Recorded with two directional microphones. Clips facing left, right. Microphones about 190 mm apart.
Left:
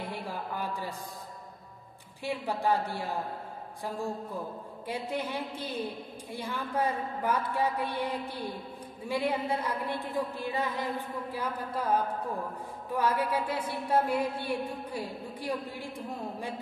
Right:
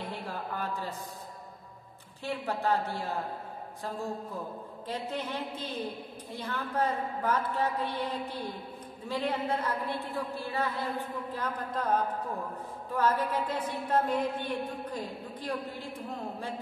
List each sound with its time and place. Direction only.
0.1 s a man's voice: 10° left (ahead or behind)
2.2 s a woman's voice: 15° left (ahead or behind)
4.8 s a woman's voice: 10° left (ahead or behind)